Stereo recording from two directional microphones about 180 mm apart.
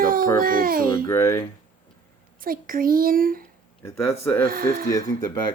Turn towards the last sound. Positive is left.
turn(degrees=20)  # may be behind; listen again after turning